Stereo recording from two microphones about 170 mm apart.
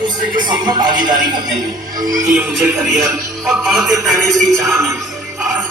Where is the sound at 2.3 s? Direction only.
5° right (ahead or behind).